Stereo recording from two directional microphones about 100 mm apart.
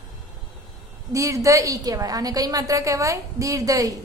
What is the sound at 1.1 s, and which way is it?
A woman's voice, 35° right (ahead or behind).